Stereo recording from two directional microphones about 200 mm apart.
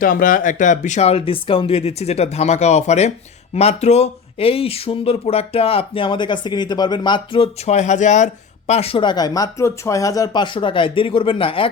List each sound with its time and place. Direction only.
0.0 s speech: 45° left (ahead or behind); by 11.7 s 25° left (ahead or behind)